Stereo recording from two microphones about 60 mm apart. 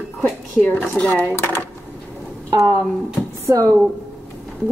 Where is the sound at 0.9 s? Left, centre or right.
Left.